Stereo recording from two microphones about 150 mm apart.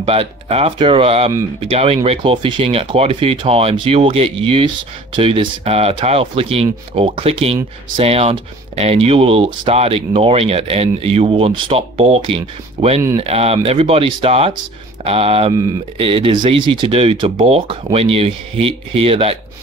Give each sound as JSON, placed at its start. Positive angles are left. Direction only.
{"t": 0.0, "sound": "speech", "side_deg": -40}